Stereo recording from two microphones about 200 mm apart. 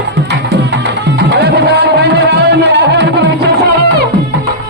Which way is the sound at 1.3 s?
55° right (ahead or behind).